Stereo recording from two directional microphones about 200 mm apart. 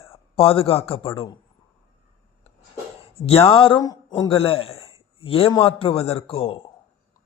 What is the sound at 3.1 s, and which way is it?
Speech, 30° left (ahead or behind).